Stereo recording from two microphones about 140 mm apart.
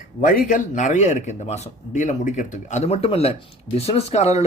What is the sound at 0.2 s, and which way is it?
Speech, 70° left (ahead or behind).